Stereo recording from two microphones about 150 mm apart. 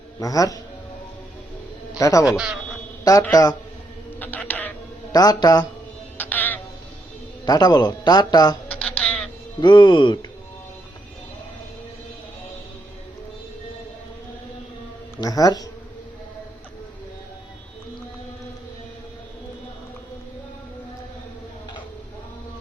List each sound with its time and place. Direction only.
0.2 s a man's voice: 25° left (ahead or behind)
2.0 s a man's voice: 20° left (ahead or behind)
2.2 s a man's voice: 5° right (ahead or behind)
3.0 s a man's voice: 25° left (ahead or behind)
4.2 s a sound: 10° left (ahead or behind)
5.1 s a man's voice: 25° left (ahead or behind)
6.1 s music: 10° left (ahead or behind)
7.4 s a man's voice: 25° left (ahead or behind)
8.7 s a sound: 10° left (ahead or behind)
9.6 s speech: 30° left (ahead or behind)
15.2 s a man's voice: 25° left (ahead or behind)